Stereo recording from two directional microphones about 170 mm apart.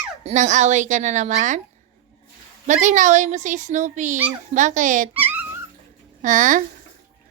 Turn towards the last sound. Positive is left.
turn(degrees=-50)  # may be behind; listen again after turning